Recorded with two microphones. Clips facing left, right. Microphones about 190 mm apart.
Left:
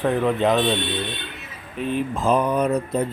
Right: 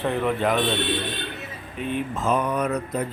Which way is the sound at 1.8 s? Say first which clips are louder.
Left 3 dB; 35° left (ahead or behind).